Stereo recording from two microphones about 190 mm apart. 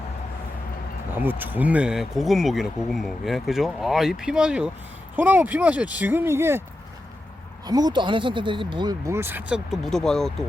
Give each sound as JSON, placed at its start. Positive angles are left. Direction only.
{"t": 1.1, "sound": "speech", "side_deg": -10}
{"t": 7.7, "sound": "speech", "side_deg": -20}
{"t": 9.6, "sound": "speech", "side_deg": 0}